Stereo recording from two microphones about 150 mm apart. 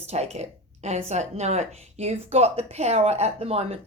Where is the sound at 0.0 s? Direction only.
45° right (ahead or behind).